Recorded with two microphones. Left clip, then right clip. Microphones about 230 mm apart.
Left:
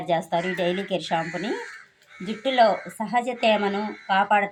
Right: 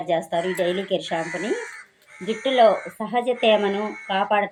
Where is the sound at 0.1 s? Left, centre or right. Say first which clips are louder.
Right 1 dB; left.